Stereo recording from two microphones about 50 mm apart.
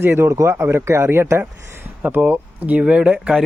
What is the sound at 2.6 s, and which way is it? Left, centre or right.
Speech, right.